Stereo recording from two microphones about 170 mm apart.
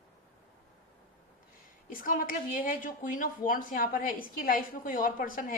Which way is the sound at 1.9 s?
55° left (ahead or behind).